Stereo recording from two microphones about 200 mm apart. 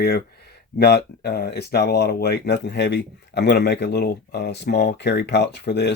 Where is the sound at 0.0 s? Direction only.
50° left (ahead or behind).